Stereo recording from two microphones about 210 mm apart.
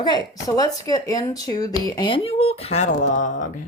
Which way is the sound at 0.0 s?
20° left (ahead or behind).